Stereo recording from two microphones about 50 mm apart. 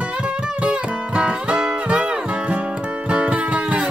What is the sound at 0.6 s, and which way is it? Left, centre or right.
Music, right.